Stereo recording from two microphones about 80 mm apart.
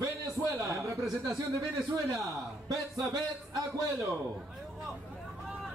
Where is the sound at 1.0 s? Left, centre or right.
Centre.